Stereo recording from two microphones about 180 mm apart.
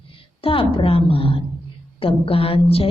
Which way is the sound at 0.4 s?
30° left (ahead or behind).